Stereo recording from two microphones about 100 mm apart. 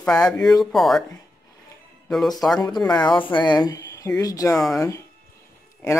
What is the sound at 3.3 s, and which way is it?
Speech, 45° left (ahead or behind).